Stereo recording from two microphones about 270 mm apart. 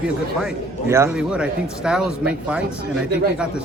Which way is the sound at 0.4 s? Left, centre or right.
Centre.